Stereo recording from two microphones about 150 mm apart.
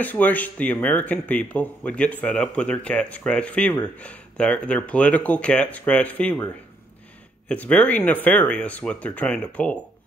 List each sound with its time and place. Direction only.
0.0 s speech: 10° left (ahead or behind)